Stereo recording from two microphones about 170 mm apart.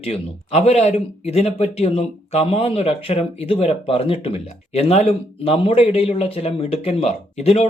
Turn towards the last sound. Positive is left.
turn(degrees=40)  # may be behind; listen again after turning